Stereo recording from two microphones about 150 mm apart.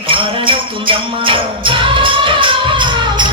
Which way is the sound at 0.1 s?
35° right (ahead or behind).